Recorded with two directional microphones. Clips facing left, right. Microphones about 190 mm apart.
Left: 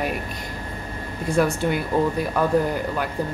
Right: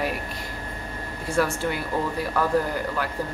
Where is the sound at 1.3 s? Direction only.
20° left (ahead or behind).